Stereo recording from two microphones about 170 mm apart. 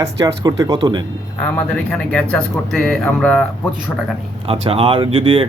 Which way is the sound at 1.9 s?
5° left (ahead or behind).